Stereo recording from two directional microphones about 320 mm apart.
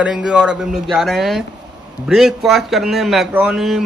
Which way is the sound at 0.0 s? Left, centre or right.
Centre.